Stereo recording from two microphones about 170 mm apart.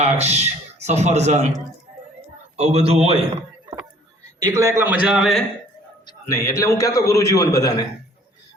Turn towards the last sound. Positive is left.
turn(degrees=20)  # may be behind; listen again after turning